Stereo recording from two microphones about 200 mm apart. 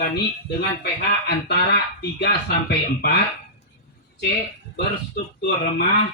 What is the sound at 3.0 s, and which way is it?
Speech, 55° left (ahead or behind).